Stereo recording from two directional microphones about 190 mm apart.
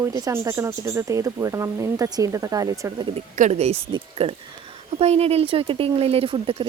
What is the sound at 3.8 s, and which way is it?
Speech, 25° right (ahead or behind).